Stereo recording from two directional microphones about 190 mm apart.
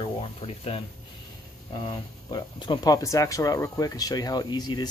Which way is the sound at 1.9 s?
25° left (ahead or behind).